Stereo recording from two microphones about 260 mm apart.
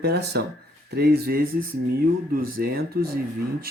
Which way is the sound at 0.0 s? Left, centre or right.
Right.